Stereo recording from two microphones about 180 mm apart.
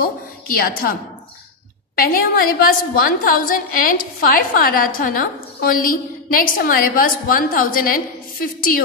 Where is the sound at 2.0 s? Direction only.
55° left (ahead or behind).